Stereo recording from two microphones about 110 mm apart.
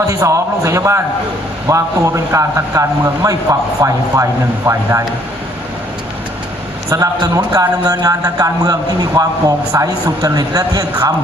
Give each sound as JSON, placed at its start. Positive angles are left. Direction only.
{"t": 0.1, "sound": "a man's voice", "side_deg": -30}
{"t": 6.9, "sound": "a man's voice", "side_deg": -30}